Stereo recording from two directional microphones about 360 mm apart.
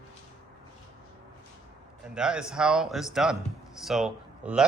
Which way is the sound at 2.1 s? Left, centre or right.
Centre.